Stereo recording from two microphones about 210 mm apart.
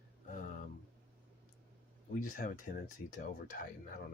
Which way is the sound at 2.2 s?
40° left (ahead or behind).